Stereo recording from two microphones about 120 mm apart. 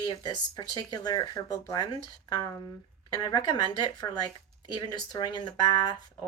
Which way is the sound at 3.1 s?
35° left (ahead or behind).